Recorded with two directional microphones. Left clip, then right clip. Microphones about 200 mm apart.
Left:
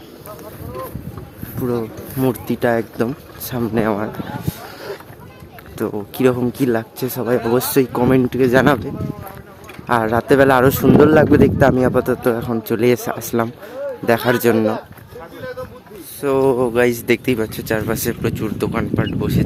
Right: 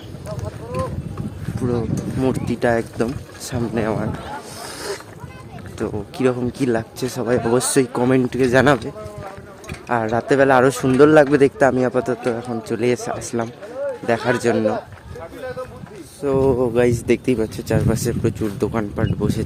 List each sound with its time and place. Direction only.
2.1 s speech: 10° left (ahead or behind)
5.7 s speech: 20° left (ahead or behind)
9.9 s speech: 20° left (ahead or behind)
16.2 s speech: 5° left (ahead or behind)